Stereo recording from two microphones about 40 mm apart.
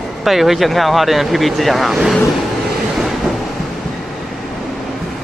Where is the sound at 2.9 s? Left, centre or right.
Centre.